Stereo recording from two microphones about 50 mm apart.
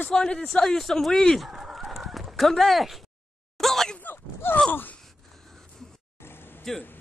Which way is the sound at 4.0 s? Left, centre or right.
Left.